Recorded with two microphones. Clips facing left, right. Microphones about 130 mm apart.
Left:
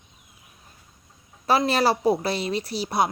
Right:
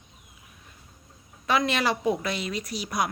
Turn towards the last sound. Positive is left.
turn(degrees=30)  # may be behind; listen again after turning